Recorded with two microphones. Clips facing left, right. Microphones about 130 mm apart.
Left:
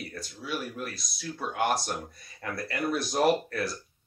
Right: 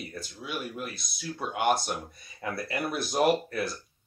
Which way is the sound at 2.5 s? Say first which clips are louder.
Right 1 dB; 25° right (ahead or behind).